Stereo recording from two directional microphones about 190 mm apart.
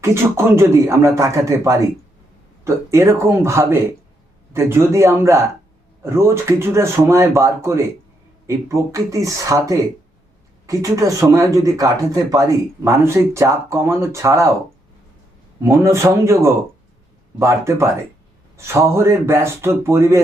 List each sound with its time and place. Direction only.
0.0 s speech: 15° right (ahead or behind)
15.8 s speech: 15° right (ahead or behind)